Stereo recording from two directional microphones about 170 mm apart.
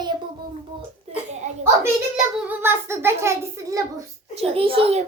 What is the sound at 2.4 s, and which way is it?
A child's voice, 15° right (ahead or behind).